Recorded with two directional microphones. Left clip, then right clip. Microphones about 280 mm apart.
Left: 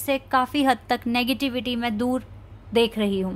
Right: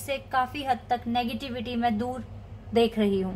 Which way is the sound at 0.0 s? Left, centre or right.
Left.